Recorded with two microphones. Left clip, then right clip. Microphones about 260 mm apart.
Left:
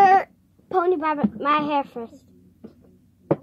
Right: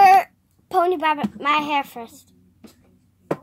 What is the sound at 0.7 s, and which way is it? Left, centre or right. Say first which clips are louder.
A woman's voice: right 2 dB; right.